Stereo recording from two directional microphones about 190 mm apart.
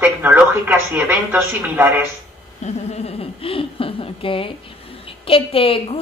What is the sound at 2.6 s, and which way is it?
Speech, 35° left (ahead or behind).